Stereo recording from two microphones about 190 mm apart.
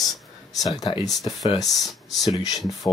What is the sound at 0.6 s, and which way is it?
Speech, 20° left (ahead or behind).